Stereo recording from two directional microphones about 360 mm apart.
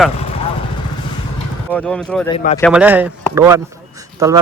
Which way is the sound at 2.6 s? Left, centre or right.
Centre.